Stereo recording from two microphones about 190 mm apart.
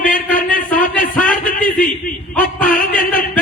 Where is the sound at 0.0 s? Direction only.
45° left (ahead or behind).